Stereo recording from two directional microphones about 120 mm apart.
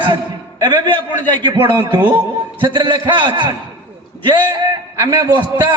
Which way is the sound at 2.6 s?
45° right (ahead or behind).